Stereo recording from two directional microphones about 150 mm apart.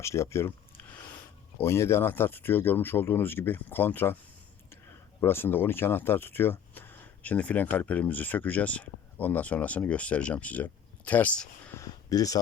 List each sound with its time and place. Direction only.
0.0 s speech: 20° left (ahead or behind)
1.5 s speech: 15° left (ahead or behind)
5.2 s speech: 15° left (ahead or behind)
11.8 s speech: 25° left (ahead or behind)